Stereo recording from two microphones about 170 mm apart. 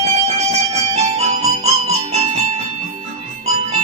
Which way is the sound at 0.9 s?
35° right (ahead or behind).